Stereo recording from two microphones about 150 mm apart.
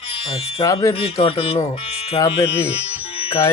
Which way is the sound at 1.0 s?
35° left (ahead or behind).